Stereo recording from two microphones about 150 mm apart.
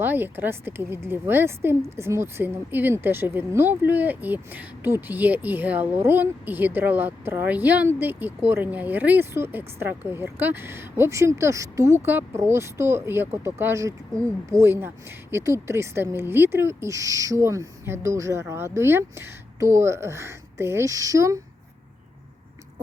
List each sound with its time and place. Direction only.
0.0 s speech: 15° right (ahead or behind)